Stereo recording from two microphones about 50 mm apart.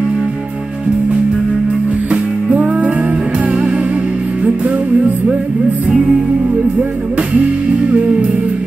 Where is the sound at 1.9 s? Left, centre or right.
Right.